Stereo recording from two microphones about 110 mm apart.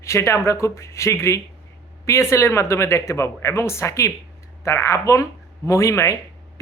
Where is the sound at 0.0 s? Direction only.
25° left (ahead or behind).